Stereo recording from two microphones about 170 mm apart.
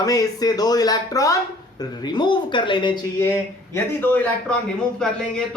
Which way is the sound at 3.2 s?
15° left (ahead or behind).